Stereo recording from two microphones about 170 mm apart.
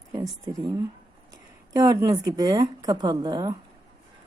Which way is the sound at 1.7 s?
20° right (ahead or behind).